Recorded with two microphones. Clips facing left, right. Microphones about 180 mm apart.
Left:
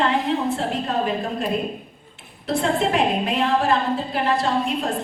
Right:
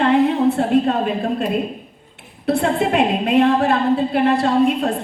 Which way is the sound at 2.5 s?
60° right (ahead or behind).